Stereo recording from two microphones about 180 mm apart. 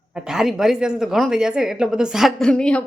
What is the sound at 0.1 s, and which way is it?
A woman's voice, 5° right (ahead or behind).